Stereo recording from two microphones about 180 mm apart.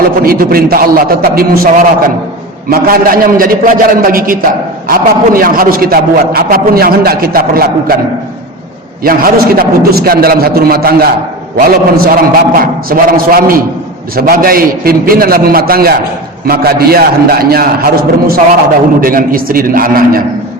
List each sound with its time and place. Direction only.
0.2 s a man's voice: 55° right (ahead or behind)
9.0 s a man's voice: 55° right (ahead or behind)